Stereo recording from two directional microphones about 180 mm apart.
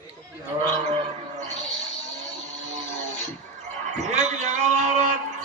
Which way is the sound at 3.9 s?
40° right (ahead or behind).